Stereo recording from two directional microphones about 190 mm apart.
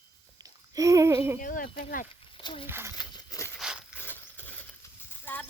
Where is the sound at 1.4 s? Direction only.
45° left (ahead or behind).